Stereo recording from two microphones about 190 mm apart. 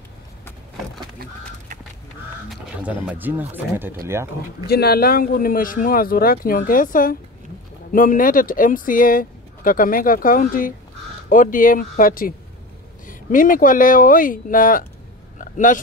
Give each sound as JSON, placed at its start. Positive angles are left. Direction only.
{"t": 2.5, "sound": "speech", "side_deg": -5}
{"t": 4.6, "sound": "speech", "side_deg": 55}
{"t": 15.3, "sound": "a sound", "side_deg": 45}